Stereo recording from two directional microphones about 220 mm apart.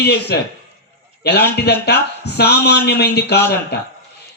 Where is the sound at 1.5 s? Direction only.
45° left (ahead or behind).